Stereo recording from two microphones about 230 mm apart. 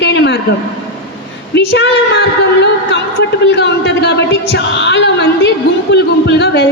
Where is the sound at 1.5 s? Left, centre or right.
Left.